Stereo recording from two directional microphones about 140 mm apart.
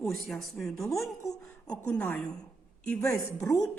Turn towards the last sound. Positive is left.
turn(degrees=20)  # may be behind; listen again after turning